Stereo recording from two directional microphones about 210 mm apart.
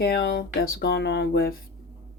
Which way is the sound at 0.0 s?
50° left (ahead or behind).